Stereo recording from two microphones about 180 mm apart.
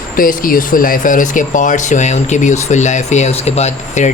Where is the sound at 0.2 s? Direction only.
50° left (ahead or behind).